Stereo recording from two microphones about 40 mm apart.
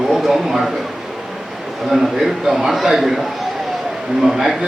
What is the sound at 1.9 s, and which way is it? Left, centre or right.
A man's voice, centre.